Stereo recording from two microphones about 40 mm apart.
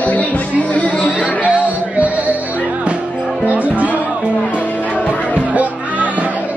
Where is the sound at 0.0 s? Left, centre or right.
Left.